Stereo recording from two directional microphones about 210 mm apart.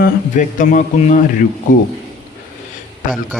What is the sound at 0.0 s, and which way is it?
Speech, 40° left (ahead or behind).